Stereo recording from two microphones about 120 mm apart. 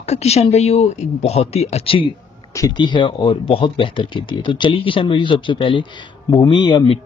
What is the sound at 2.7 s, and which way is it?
Speech, 40° left (ahead or behind).